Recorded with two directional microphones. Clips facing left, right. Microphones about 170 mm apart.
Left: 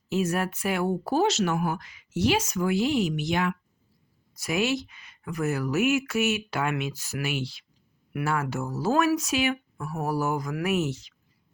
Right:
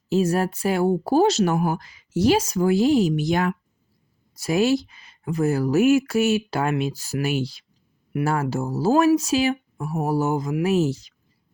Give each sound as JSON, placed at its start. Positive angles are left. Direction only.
{"t": 0.1, "sound": "speech", "side_deg": -35}